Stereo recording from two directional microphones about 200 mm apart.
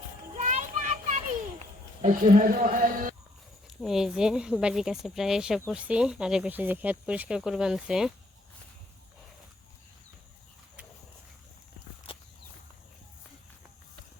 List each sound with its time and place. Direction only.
0.3 s a sound: 40° right (ahead or behind)
2.0 s speech: 40° right (ahead or behind)
3.7 s speech: centre (ahead or behind)